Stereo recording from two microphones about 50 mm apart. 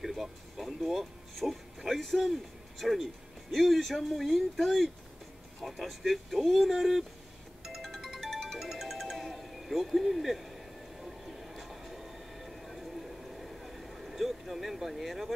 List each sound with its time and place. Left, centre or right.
0.0 s music: centre
3.5 s speech: centre
7.6 s music: centre